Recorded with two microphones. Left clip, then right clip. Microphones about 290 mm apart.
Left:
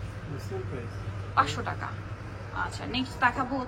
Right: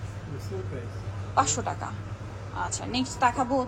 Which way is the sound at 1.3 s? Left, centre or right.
Centre.